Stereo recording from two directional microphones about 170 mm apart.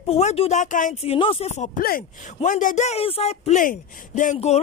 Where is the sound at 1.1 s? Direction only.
30° left (ahead or behind).